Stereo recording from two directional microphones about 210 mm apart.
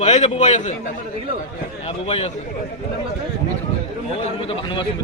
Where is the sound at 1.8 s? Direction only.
25° left (ahead or behind).